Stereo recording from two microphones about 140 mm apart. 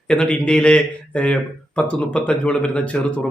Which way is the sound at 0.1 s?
5° left (ahead or behind).